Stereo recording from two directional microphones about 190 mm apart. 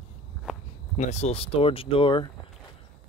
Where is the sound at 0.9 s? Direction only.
35° left (ahead or behind).